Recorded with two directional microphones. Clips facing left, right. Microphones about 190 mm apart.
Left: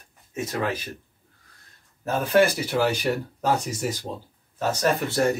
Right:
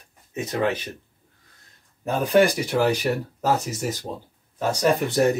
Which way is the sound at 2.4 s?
5° left (ahead or behind).